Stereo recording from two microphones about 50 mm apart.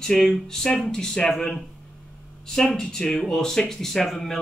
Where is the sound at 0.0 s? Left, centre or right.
Centre.